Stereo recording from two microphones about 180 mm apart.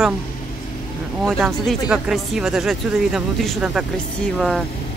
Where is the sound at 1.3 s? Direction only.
Centre (ahead or behind).